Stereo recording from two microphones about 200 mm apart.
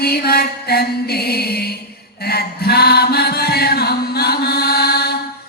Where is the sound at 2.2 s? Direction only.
50° left (ahead or behind).